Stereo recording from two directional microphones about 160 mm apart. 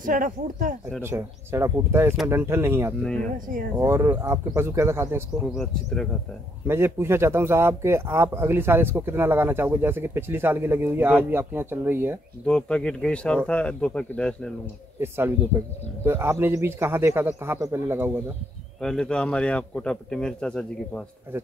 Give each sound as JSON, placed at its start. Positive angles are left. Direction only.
{"t": 0.0, "sound": "speech", "side_deg": -55}
{"t": 1.0, "sound": "speech", "side_deg": -15}
{"t": 3.0, "sound": "a man's voice", "side_deg": 5}
{"t": 3.3, "sound": "speech", "side_deg": -55}
{"t": 3.7, "sound": "speech", "side_deg": -15}
{"t": 5.5, "sound": "a man's voice", "side_deg": 0}
{"t": 6.7, "sound": "speech", "side_deg": -15}
{"t": 12.4, "sound": "a man's voice", "side_deg": 5}
{"t": 15.0, "sound": "speech", "side_deg": -15}
{"t": 18.8, "sound": "a man's voice", "side_deg": 5}